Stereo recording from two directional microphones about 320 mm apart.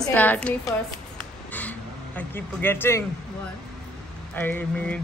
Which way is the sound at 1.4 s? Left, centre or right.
Centre.